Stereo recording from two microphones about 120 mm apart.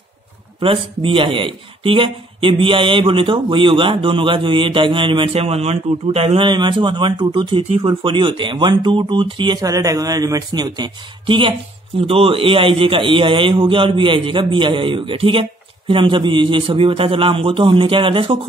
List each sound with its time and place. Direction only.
0.6 s speech: 50° right (ahead or behind)